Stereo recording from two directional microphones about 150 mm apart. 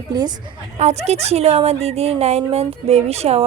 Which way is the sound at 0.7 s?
50° right (ahead or behind).